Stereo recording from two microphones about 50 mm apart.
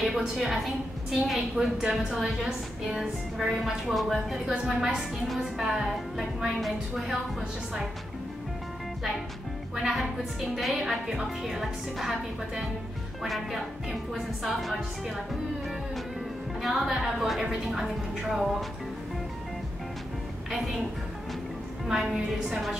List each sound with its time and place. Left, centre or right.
0.0 s a woman's voice: centre
1.8 s a woman's voice: centre
9.8 s a woman's voice: centre
16.6 s a woman's voice: centre
21.8 s a woman's voice: centre